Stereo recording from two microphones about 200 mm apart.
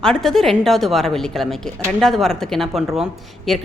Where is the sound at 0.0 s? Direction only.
Centre (ahead or behind).